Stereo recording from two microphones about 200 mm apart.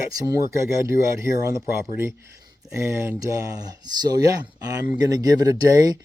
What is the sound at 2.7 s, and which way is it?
Speech, 10° right (ahead or behind).